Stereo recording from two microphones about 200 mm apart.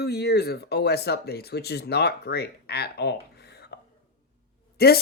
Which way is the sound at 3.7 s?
55° left (ahead or behind).